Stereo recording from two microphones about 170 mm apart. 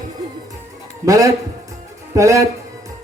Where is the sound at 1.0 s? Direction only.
20° right (ahead or behind).